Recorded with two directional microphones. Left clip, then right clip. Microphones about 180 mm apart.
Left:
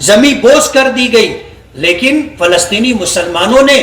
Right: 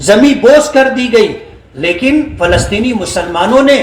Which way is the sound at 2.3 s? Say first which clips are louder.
Left 2 dB; 35° right (ahead or behind).